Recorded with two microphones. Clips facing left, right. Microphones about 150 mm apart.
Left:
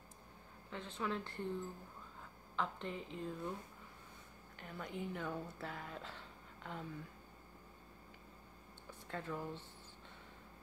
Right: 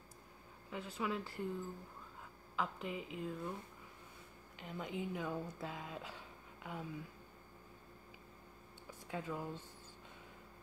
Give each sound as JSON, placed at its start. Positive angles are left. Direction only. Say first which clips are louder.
{"t": 0.7, "sound": "speech", "louder": "right 1 dB", "side_deg": -10}
{"t": 2.5, "sound": "speech", "louder": "right 1 dB", "side_deg": -5}
{"t": 4.6, "sound": "speech", "louder": "right 2 dB", "side_deg": -15}
{"t": 9.0, "sound": "speech", "louder": "right 1 dB", "side_deg": -10}